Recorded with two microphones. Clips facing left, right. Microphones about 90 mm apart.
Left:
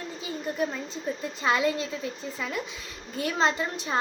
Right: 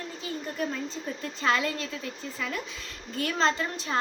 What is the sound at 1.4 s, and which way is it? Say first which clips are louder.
A woman's voice: left 2 dB; 20° left (ahead or behind).